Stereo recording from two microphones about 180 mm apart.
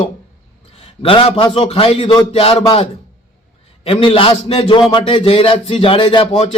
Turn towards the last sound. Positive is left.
turn(degrees=35)  # may be behind; listen again after turning